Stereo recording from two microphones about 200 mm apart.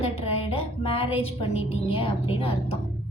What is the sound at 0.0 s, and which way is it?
A woman's voice, 30° left (ahead or behind).